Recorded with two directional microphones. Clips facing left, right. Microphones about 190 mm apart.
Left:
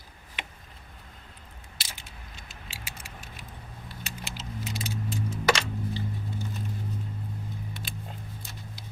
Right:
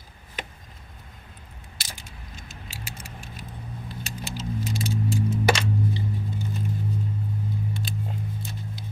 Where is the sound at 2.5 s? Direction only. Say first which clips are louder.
Right 5 dB; 45° right (ahead or behind).